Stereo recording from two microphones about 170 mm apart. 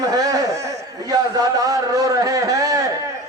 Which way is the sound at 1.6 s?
20° right (ahead or behind).